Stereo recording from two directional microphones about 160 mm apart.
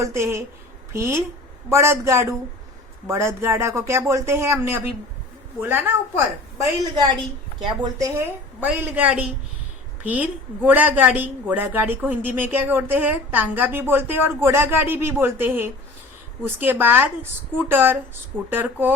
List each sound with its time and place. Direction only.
0.0 s a woman's voice: 15° right (ahead or behind)
7.0 s a woman's voice: 25° right (ahead or behind)
8.6 s a woman's voice: 10° right (ahead or behind)